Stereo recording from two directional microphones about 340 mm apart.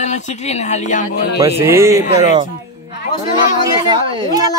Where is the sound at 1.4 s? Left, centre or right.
Centre.